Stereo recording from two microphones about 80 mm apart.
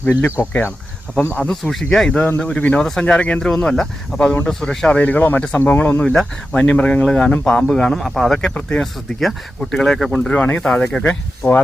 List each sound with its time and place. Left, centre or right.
0.0 s speech: left
1.4 s speech: centre
2.1 s speech: left
4.9 s speech: centre
6.0 s speech: centre
10.3 s speech: centre
11.1 s speech: left